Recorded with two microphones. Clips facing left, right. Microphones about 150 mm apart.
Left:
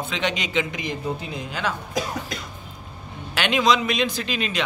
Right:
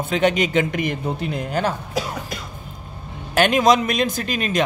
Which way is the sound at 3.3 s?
45° right (ahead or behind).